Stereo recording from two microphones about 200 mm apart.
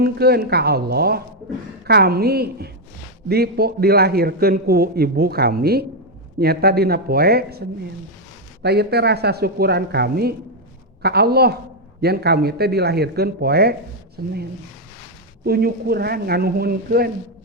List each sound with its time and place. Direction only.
0.0 s a man's voice: 50° right (ahead or behind)
8.6 s a man's voice: 55° right (ahead or behind)
15.4 s a man's voice: 50° right (ahead or behind)